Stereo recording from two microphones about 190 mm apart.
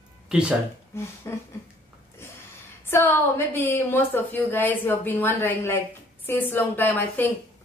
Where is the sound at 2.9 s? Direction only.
10° left (ahead or behind).